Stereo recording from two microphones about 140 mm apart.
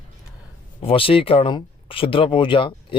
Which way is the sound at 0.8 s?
40° left (ahead or behind).